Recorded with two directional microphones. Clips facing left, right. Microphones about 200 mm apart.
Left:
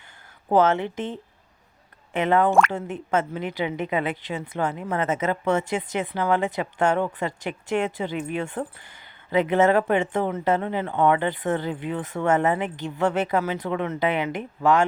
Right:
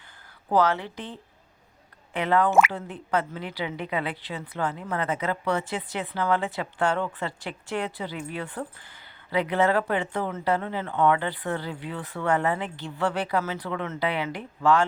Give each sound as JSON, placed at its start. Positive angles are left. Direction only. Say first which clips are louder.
{"t": 0.4, "sound": "a woman's voice", "louder": "left 4 dB", "side_deg": 25}
{"t": 2.5, "sound": "speech", "louder": "left 1 dB", "side_deg": -5}
{"t": 2.9, "sound": "a woman's voice", "louder": "left 3 dB", "side_deg": 20}